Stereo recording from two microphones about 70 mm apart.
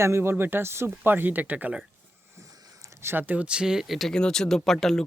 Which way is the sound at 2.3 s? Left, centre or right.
Right.